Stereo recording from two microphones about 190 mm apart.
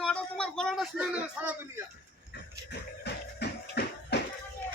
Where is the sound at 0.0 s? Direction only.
5° left (ahead or behind).